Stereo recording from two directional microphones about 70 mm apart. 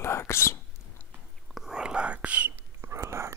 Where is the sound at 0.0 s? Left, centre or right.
Left.